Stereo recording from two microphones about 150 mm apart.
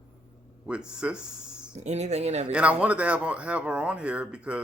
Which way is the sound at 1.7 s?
50° right (ahead or behind).